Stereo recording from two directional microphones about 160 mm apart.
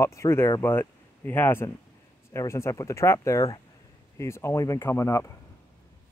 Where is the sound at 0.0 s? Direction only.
20° left (ahead or behind).